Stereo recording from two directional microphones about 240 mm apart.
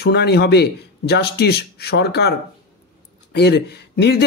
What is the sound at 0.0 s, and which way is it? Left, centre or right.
A man's voice, left.